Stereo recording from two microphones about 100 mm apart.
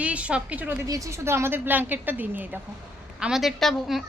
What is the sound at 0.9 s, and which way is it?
Speech, 30° right (ahead or behind).